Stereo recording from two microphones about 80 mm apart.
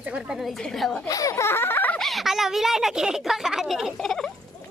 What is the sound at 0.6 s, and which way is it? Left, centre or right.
Speech, centre.